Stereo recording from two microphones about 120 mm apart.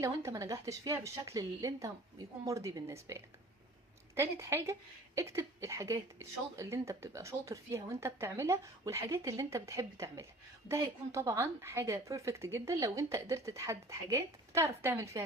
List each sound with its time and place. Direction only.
0.0 s a woman's voice: 25° right (ahead or behind)